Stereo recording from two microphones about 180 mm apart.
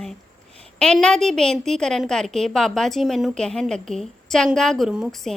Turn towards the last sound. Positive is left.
turn(degrees=0)  # may be behind; listen again after turning